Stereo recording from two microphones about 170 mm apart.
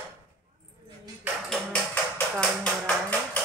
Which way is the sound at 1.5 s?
5° left (ahead or behind).